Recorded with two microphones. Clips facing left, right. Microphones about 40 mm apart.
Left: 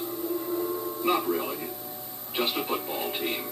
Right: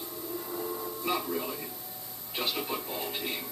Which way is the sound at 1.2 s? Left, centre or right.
Left.